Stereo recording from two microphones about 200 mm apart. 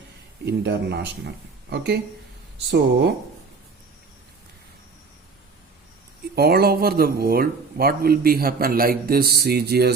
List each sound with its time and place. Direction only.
0.4 s speech: 55° right (ahead or behind)
6.3 s speech: 50° right (ahead or behind)